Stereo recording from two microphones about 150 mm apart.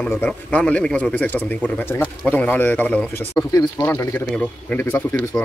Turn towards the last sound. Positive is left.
turn(degrees=15)  # may be behind; listen again after turning